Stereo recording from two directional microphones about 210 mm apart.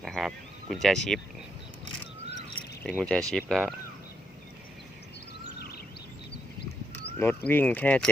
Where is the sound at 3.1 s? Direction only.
5° left (ahead or behind).